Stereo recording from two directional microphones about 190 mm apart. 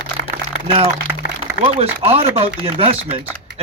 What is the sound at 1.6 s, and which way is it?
Speech, 30° right (ahead or behind).